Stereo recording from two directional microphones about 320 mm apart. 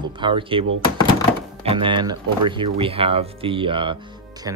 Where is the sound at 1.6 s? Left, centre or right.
Centre.